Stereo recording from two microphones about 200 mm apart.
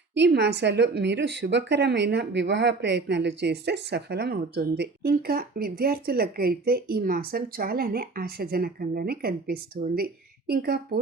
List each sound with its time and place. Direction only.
0.1 s a woman's voice: 60° right (ahead or behind)